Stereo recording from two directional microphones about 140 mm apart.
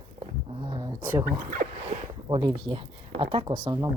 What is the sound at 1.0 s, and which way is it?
Speech, 15° right (ahead or behind).